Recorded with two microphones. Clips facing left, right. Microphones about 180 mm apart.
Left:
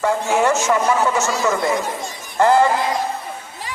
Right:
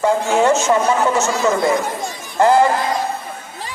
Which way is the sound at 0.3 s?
20° right (ahead or behind).